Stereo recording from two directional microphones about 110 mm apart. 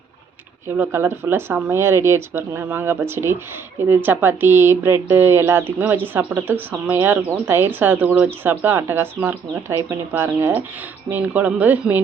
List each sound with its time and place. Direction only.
0.8 s speech: 20° right (ahead or behind)